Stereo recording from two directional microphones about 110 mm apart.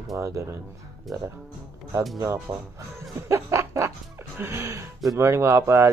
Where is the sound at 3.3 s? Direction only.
25° right (ahead or behind).